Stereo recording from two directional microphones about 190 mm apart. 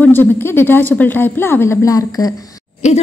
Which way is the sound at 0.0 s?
10° left (ahead or behind).